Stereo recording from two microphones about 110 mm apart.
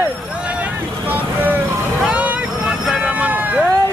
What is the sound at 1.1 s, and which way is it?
Vehicle, 15° right (ahead or behind).